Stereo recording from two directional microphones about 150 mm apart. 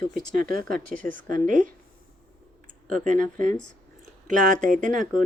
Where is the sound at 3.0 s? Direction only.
55° right (ahead or behind).